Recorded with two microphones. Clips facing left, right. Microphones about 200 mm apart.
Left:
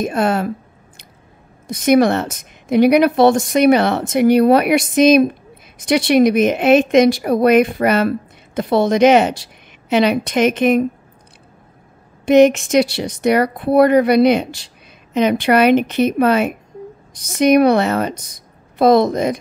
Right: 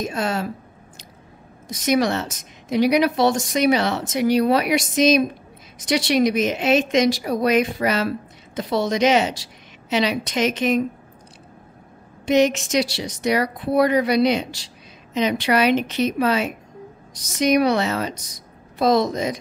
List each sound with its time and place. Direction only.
0.0 s speech: 55° left (ahead or behind)
1.7 s speech: 55° left (ahead or behind)
12.3 s speech: 55° left (ahead or behind)